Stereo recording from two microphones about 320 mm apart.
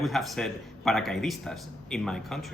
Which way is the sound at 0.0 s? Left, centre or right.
Centre.